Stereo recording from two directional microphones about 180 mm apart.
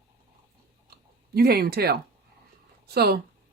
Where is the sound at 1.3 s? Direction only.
60° right (ahead or behind).